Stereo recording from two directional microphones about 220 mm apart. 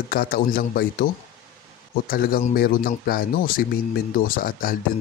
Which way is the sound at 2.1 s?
40° left (ahead or behind).